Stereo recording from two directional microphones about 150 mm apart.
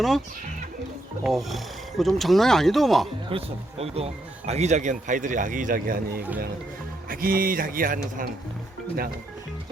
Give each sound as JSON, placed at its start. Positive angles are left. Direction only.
{"t": 1.2, "sound": "speech", "side_deg": 0}
{"t": 3.2, "sound": "speech", "side_deg": -40}